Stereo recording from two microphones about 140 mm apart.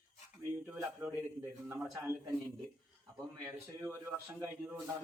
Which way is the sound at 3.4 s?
15° right (ahead or behind).